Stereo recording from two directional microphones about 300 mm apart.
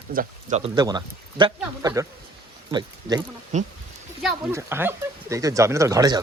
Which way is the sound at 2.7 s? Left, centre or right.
Centre.